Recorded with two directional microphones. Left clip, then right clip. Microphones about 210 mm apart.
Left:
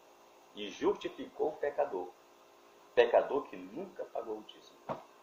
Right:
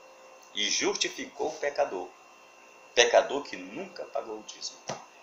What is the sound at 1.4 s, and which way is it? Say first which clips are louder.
Speech: right 3 dB; 10° right (ahead or behind).